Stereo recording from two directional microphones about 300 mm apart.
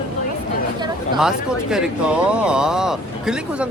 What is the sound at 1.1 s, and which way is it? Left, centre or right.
Speech, centre.